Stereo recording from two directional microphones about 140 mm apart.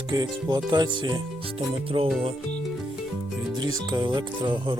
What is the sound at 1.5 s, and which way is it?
Music, 40° right (ahead or behind).